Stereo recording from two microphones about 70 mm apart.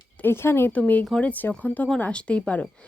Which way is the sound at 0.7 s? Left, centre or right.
Left.